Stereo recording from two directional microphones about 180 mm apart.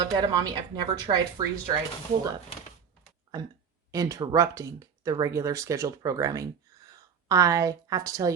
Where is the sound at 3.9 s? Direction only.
20° right (ahead or behind).